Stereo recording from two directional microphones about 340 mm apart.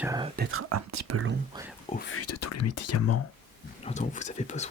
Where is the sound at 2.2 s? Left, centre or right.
Left.